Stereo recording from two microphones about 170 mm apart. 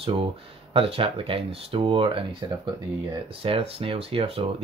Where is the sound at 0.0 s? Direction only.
35° right (ahead or behind).